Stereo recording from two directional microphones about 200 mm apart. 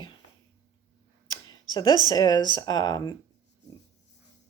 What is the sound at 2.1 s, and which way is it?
Speech, 20° left (ahead or behind).